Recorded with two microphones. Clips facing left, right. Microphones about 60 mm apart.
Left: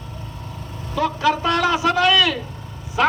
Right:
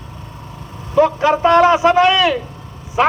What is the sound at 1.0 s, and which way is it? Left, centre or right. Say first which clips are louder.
A man's voice: right 6 dB; right.